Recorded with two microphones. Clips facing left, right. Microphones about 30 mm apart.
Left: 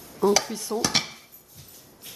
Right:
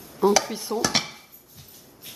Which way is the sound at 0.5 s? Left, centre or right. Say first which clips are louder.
Right 1 dB; centre.